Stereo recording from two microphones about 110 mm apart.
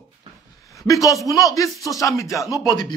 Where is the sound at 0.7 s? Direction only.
30° left (ahead or behind).